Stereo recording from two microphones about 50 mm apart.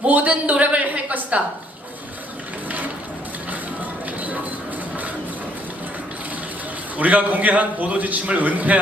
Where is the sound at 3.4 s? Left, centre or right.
Right.